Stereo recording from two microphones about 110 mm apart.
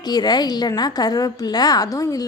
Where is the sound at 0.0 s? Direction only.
40° left (ahead or behind).